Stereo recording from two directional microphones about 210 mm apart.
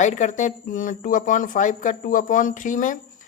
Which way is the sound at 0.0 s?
35° left (ahead or behind).